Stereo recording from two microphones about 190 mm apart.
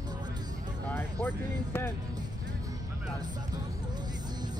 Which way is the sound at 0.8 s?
10° left (ahead or behind).